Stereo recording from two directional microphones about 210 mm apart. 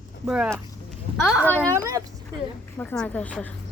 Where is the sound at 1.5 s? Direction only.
15° right (ahead or behind).